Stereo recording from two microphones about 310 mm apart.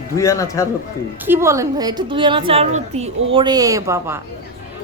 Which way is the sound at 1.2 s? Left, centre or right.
Centre.